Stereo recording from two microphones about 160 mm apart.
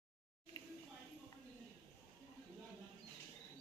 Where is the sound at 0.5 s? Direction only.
25° left (ahead or behind).